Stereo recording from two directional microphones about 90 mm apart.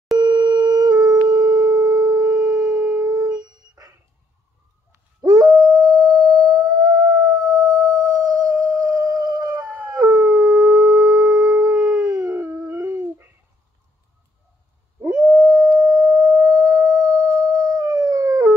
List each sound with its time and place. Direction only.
0.2 s a sound: 55° right (ahead or behind)
5.2 s dog: 45° right (ahead or behind)
5.8 s howl: 45° right (ahead or behind)
9.8 s howl: 35° right (ahead or behind)
15.0 s howl: 35° right (ahead or behind)
16.3 s singing bowl: 35° right (ahead or behind)
16.7 s howl: 40° right (ahead or behind)